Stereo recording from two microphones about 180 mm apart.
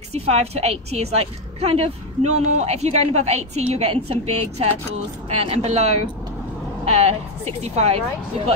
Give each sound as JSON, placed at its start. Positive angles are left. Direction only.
{"t": 0.1, "sound": "a woman's voice", "side_deg": -35}